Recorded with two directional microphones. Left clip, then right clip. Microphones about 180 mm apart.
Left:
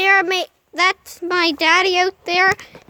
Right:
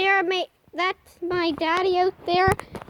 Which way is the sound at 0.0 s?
Centre (ahead or behind).